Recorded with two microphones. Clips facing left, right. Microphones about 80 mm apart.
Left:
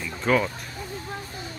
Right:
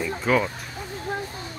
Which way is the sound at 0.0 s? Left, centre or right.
Centre.